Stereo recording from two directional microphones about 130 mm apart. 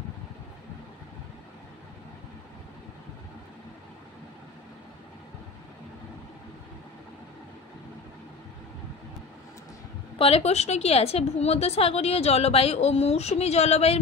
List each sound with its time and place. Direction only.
10.1 s a woman's voice: 50° left (ahead or behind)